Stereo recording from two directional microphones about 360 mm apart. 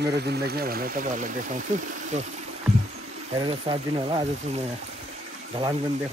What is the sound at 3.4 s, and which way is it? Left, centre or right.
Speech, centre.